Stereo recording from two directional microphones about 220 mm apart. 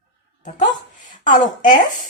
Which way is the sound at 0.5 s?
35° left (ahead or behind).